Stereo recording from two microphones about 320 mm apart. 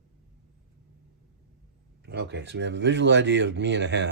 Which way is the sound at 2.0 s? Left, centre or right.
Right.